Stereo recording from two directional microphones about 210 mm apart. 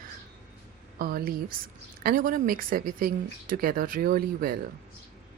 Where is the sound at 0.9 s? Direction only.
45° right (ahead or behind).